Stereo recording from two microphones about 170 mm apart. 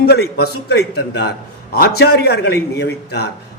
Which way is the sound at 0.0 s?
70° left (ahead or behind).